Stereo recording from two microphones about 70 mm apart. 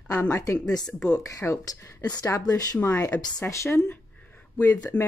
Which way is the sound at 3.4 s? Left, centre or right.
Left.